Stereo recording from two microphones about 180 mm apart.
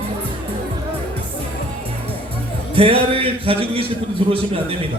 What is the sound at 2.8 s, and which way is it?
A man's voice, 30° right (ahead or behind).